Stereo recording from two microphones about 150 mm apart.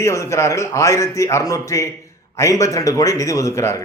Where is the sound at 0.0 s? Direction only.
20° left (ahead or behind).